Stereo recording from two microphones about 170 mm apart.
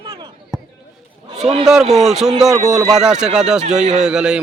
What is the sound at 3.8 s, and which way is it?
Speech, 40° right (ahead or behind).